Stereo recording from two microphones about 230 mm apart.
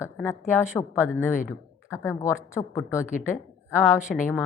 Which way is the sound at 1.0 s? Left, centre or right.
Left.